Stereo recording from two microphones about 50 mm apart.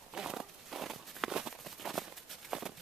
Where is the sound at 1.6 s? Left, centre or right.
Centre.